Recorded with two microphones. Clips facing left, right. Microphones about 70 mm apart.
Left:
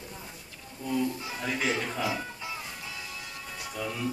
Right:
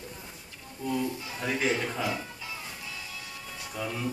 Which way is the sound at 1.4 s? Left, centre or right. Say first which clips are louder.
Right 2 dB; centre.